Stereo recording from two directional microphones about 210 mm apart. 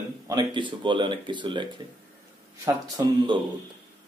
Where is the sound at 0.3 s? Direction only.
20° right (ahead or behind).